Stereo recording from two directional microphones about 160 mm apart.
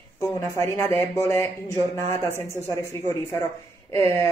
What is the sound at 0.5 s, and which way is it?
Speech, 15° left (ahead or behind).